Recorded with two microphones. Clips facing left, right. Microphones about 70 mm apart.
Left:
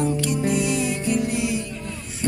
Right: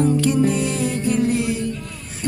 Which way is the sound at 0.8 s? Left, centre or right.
Right.